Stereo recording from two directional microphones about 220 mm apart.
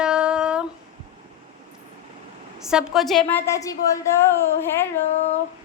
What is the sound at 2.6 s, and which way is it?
A woman's voice, centre (ahead or behind).